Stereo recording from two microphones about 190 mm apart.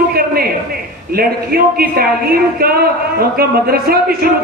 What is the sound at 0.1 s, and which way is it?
A man's voice, 50° right (ahead or behind).